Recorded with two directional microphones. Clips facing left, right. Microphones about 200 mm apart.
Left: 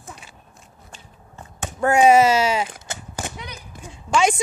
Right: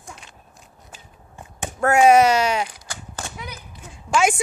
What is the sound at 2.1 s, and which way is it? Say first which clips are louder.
Speech: even; centre (ahead or behind).